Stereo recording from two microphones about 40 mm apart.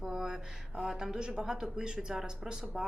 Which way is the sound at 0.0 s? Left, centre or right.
Centre.